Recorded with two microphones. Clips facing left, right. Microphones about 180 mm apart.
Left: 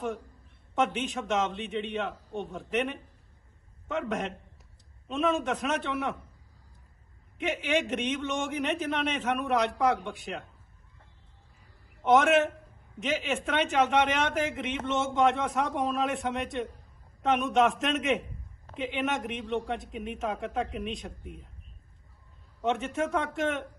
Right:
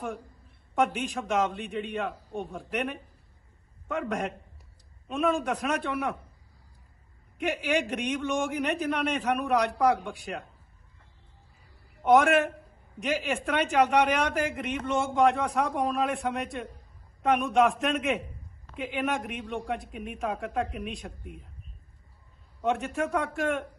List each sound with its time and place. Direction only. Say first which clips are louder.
0.0 s a woman's voice: left 2 dB; 10° right (ahead or behind)
0.8 s speech: right 1 dB; centre (ahead or behind)
7.3 s speech: right 1 dB; centre (ahead or behind)
12.0 s speech: right 1 dB; centre (ahead or behind)
22.6 s speech: right 1 dB; centre (ahead or behind)